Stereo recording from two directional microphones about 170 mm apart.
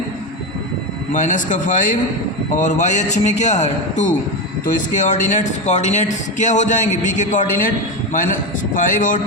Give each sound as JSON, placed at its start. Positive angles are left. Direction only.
{"t": 1.1, "sound": "a man's voice", "side_deg": 50}